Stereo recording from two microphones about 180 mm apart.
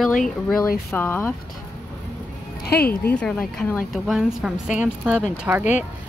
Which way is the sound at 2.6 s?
60° left (ahead or behind).